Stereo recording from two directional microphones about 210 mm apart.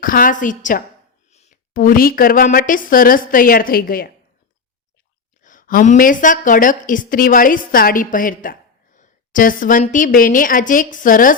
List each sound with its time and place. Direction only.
0.0 s a woman's voice: 40° left (ahead or behind)
5.4 s a woman's voice: 40° left (ahead or behind)